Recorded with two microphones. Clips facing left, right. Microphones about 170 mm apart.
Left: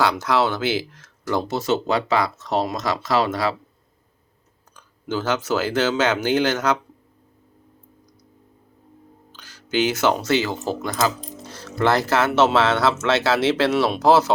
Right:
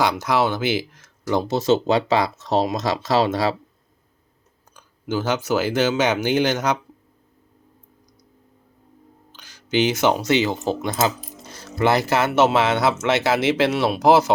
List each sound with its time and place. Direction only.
0.0 s speech: 10° right (ahead or behind)
4.8 s speech: 15° right (ahead or behind)
9.3 s speech: 15° right (ahead or behind)
11.2 s music: 10° right (ahead or behind)
12.4 s speech: 10° right (ahead or behind)